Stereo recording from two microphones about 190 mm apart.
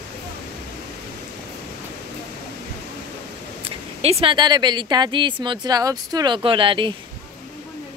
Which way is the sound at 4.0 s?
30° right (ahead or behind).